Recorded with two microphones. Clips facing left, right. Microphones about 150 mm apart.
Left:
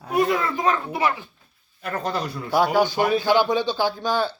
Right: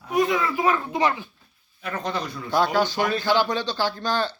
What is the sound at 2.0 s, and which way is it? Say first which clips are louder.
A man's voice: left 2 dB; 5° left (ahead or behind).